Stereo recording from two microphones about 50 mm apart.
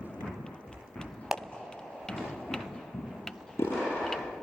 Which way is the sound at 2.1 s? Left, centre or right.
Centre.